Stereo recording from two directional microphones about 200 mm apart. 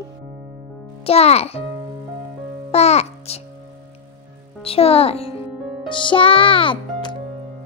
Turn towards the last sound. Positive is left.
turn(degrees=25)  # may be behind; listen again after turning